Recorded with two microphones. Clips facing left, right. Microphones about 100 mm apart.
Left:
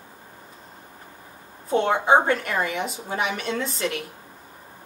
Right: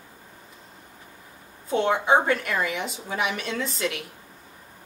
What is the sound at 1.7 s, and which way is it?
A woman's voice, 35° left (ahead or behind).